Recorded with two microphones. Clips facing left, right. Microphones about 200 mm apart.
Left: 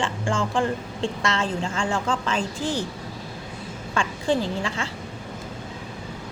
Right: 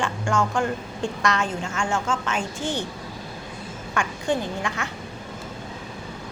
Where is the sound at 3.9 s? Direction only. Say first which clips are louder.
Left 1 dB; 30° left (ahead or behind).